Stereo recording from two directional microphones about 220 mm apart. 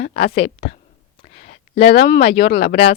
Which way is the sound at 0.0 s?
30° left (ahead or behind).